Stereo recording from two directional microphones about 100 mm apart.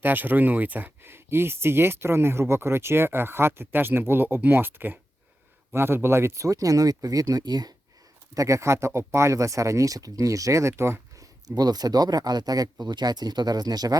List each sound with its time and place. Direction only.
0.0 s speech: 20° right (ahead or behind); by 7.7 s 45° right (ahead or behind)
8.4 s speech: 30° right (ahead or behind)
11.4 s speech: 40° right (ahead or behind)